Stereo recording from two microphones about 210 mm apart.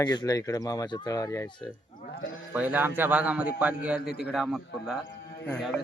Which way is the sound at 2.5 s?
10° right (ahead or behind).